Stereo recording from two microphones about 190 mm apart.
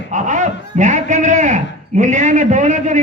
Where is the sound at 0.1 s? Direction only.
40° right (ahead or behind).